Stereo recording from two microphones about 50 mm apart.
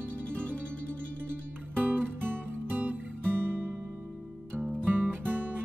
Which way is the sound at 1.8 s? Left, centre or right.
Right.